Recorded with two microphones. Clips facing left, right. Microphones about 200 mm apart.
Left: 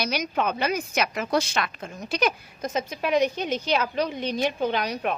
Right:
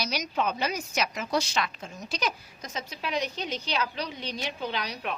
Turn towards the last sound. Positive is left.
turn(degrees=50)  # may be behind; listen again after turning